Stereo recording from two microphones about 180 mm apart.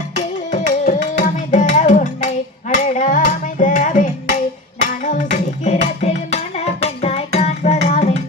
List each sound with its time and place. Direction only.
0.5 s music: 45° left (ahead or behind)